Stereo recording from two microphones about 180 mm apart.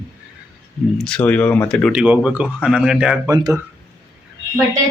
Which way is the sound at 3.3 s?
20° right (ahead or behind).